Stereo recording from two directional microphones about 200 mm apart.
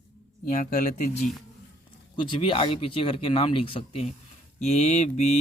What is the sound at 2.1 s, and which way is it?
Speech, 25° left (ahead or behind).